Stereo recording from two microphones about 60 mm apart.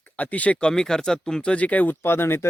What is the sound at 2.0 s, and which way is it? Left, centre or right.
Speech, left.